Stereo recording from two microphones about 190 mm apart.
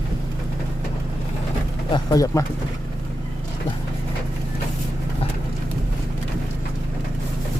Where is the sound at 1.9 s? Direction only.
20° left (ahead or behind).